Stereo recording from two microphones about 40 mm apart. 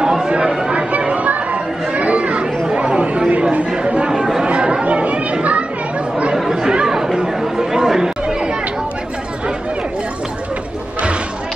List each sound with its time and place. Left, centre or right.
0.5 s speech: centre
0.7 s chatter: right
2.4 s chatter: centre
2.8 s chatter: right
4.1 s chatter: centre
4.8 s children playing: right
6.3 s chatter: centre